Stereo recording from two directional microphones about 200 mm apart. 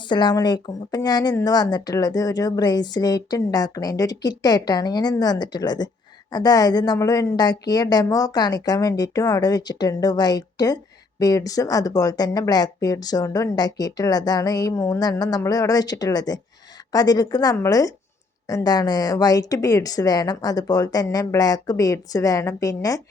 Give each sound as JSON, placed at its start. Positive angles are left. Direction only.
{"t": 0.1, "sound": "speech", "side_deg": 20}